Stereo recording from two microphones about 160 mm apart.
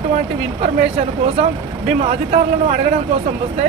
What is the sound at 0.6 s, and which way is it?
Speech, 40° right (ahead or behind).